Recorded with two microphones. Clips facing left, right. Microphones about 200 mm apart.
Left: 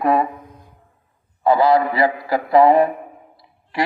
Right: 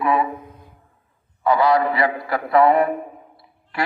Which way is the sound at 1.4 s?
30° left (ahead or behind).